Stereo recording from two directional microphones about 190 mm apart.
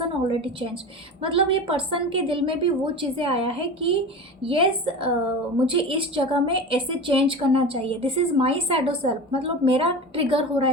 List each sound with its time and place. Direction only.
1.2 s a woman's voice: 30° right (ahead or behind)